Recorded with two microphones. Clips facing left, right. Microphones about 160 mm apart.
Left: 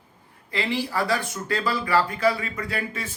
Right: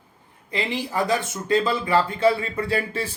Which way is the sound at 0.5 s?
20° right (ahead or behind).